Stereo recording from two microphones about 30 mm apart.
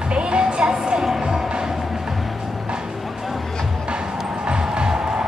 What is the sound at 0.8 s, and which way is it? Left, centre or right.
Music, centre.